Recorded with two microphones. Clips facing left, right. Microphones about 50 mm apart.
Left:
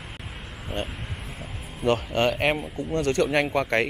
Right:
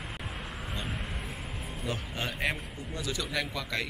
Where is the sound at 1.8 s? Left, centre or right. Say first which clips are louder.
Left 14 dB; left.